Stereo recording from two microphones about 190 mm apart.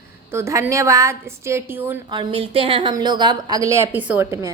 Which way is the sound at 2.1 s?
30° right (ahead or behind).